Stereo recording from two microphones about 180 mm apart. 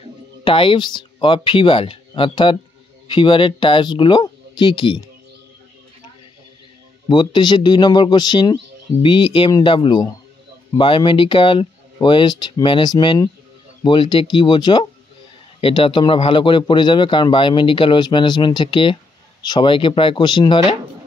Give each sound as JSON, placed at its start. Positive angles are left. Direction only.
{"t": 0.4, "sound": "speech", "side_deg": 30}
{"t": 7.1, "sound": "a man's voice", "side_deg": 25}